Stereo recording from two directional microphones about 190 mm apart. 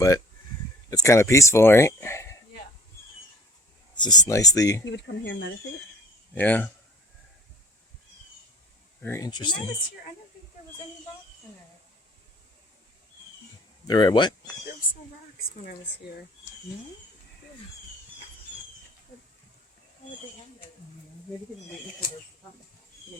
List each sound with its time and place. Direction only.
0.9 s speech: 15° left (ahead or behind)
3.9 s speech: 20° left (ahead or behind)
4.9 s speech: 70° left (ahead or behind)
6.3 s speech: 10° left (ahead or behind)
9.0 s speech: 10° left (ahead or behind)
13.8 s speech: 20° left (ahead or behind)